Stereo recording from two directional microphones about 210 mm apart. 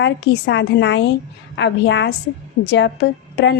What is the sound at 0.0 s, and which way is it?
A woman's voice, 55° left (ahead or behind).